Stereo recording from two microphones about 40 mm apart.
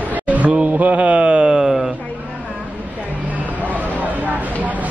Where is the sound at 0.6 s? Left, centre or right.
Right.